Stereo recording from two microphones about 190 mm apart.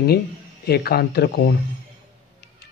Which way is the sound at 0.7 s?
55° left (ahead or behind).